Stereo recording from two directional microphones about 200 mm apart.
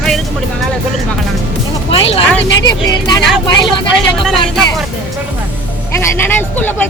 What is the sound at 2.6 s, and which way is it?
Music, 20° left (ahead or behind).